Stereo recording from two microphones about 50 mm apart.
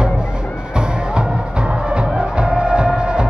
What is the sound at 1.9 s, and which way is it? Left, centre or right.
Music, right.